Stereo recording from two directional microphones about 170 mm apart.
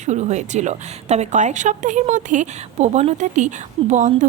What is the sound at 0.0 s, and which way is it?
A woman's voice, 45° right (ahead or behind).